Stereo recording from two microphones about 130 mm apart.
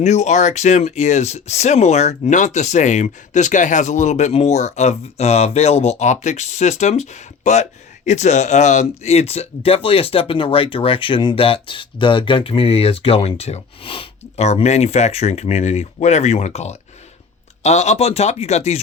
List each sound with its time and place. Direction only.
0.0 s speech: 60° left (ahead or behind)